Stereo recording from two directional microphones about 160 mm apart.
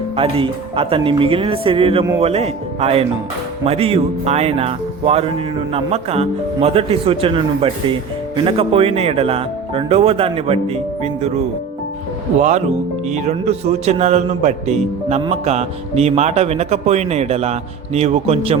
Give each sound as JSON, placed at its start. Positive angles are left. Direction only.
{"t": 0.2, "sound": "speech", "side_deg": -35}
{"t": 12.4, "sound": "speech", "side_deg": -50}